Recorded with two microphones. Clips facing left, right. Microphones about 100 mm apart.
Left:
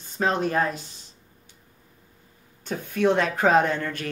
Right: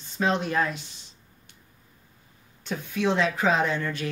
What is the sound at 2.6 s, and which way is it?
Speech, 50° left (ahead or behind).